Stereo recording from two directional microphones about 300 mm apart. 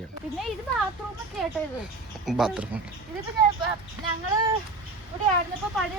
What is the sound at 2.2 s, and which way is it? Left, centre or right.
Speech, centre.